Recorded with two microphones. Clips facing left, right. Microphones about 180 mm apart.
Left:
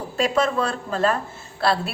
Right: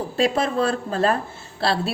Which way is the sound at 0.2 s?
30° right (ahead or behind).